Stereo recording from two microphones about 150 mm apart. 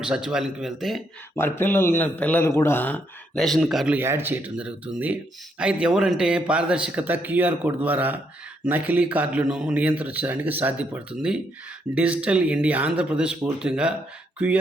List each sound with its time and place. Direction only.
0.0 s speech: 5° right (ahead or behind)
1.4 s speech: 15° left (ahead or behind); by 14.6 s 10° right (ahead or behind)